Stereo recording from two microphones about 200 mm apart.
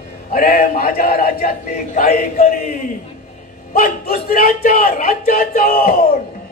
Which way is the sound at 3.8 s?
50° left (ahead or behind).